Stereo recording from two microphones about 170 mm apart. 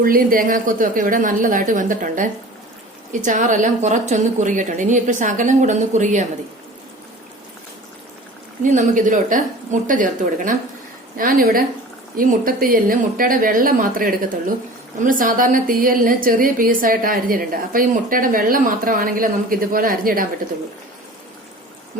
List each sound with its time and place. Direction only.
0.0 s a woman's voice: 55° right (ahead or behind)
8.6 s a woman's voice: 50° right (ahead or behind)